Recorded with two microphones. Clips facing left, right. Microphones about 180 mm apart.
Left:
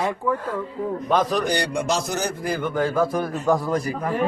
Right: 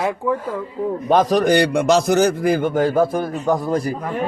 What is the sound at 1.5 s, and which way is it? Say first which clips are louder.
A man's voice: right 8 dB; 70° right (ahead or behind).